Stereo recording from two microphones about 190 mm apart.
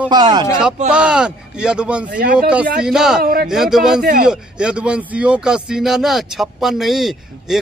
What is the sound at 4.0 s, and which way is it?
Speech, 55° right (ahead or behind).